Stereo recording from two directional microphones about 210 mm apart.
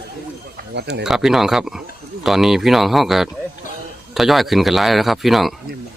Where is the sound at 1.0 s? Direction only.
Centre (ahead or behind).